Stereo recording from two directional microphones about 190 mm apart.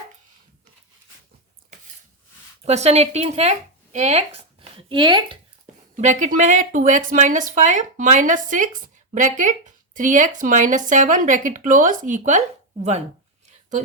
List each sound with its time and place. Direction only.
2.6 s speech: 35° right (ahead or behind)
6.0 s speech: 40° right (ahead or behind)